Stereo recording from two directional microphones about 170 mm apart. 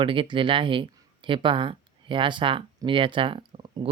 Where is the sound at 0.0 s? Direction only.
30° right (ahead or behind).